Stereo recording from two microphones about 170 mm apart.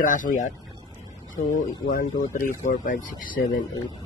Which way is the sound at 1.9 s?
50° left (ahead or behind).